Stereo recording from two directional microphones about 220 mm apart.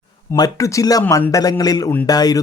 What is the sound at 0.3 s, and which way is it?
A man's voice, 15° left (ahead or behind).